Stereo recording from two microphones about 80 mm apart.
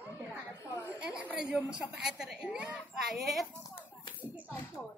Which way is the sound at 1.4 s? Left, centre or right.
Centre.